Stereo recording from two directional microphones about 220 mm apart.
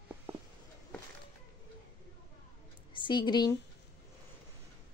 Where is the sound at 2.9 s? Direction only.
20° left (ahead or behind).